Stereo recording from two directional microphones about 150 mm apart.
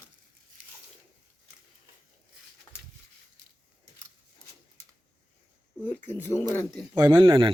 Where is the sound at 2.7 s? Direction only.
20° left (ahead or behind).